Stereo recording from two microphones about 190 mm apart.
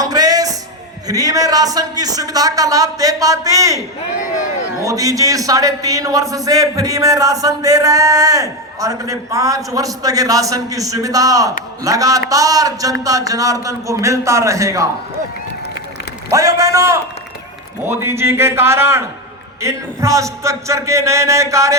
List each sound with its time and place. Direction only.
0.0 s music: 20° right (ahead or behind)
1.0 s a man's voice: 20° right (ahead or behind)
16.3 s a man's voice: 15° right (ahead or behind)